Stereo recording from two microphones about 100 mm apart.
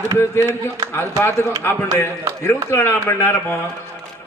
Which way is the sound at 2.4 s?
25° left (ahead or behind).